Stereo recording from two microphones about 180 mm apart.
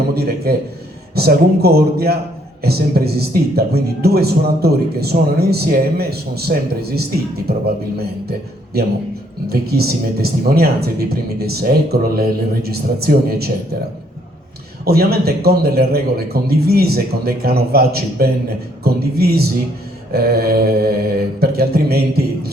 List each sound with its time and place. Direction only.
0.1 s a man's voice: 60° right (ahead or behind)
14.8 s speech: 60° right (ahead or behind)